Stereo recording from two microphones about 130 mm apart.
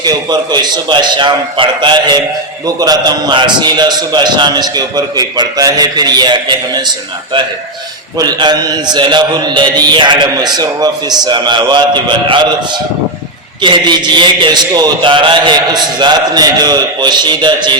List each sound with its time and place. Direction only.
0.0 s a man's voice: 30° right (ahead or behind)
8.2 s a man's voice: 35° right (ahead or behind)
13.6 s a man's voice: 35° right (ahead or behind)